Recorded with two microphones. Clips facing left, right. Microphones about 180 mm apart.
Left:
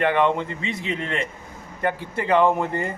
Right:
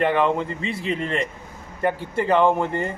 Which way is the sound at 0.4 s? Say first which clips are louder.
Right 1 dB; 35° right (ahead or behind).